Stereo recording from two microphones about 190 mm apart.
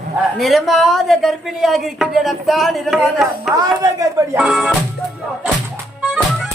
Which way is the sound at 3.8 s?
20° right (ahead or behind).